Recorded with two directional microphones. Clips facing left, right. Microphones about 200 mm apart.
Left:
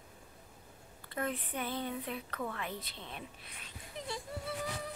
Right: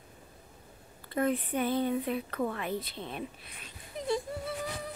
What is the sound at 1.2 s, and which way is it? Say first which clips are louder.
Speech: right 9 dB; 45° right (ahead or behind).